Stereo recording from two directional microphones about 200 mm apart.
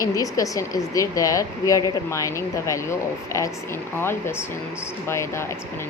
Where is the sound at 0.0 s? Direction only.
15° left (ahead or behind).